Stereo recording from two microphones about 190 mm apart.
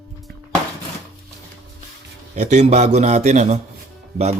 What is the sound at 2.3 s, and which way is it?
Speech, 40° right (ahead or behind).